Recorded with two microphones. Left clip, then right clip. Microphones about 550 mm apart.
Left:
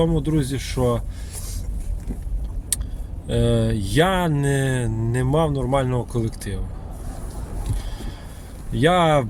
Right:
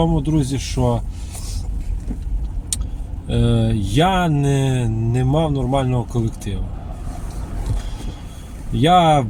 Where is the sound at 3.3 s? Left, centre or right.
Left.